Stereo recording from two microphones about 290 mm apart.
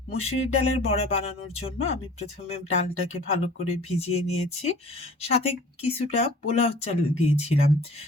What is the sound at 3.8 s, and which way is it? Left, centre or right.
Speech, left.